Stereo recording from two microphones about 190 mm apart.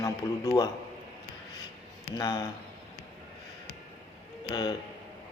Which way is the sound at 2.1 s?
20° left (ahead or behind).